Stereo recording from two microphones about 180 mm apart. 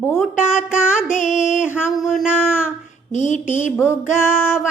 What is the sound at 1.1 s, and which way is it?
Music, 40° left (ahead or behind).